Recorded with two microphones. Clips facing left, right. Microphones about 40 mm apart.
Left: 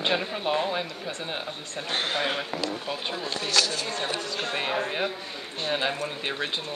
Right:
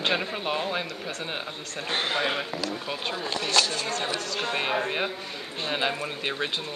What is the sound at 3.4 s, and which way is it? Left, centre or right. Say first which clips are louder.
Speech: right 1 dB; right.